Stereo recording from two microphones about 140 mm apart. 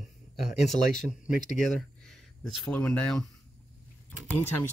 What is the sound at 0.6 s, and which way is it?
Speech, 5° left (ahead or behind).